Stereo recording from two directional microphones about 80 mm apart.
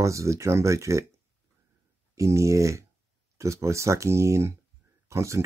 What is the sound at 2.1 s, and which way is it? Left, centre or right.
Speech, right.